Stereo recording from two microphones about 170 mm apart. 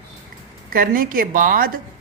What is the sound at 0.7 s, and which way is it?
Speech, 55° right (ahead or behind).